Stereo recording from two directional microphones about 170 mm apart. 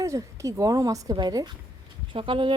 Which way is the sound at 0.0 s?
20° right (ahead or behind).